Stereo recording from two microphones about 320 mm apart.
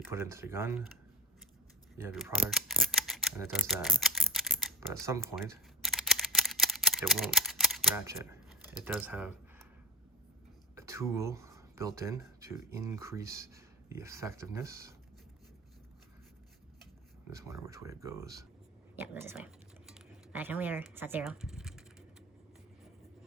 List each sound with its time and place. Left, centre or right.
0.1 s speech: centre
2.0 s speech: centre
5.2 s camera: centre
10.8 s speech: centre
17.3 s speech: centre